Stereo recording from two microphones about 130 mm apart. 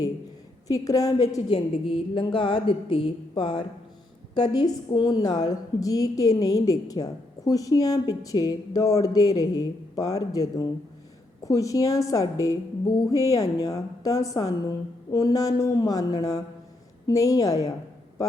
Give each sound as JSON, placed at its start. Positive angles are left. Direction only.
{"t": 0.7, "sound": "a woman's voice", "side_deg": 25}
{"t": 1.5, "sound": "a woman's voice", "side_deg": 45}